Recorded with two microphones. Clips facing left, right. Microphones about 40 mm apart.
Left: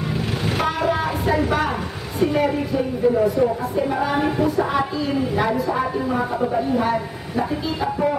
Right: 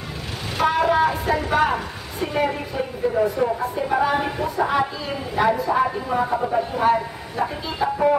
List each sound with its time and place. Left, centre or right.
0.6 s a woman's voice: centre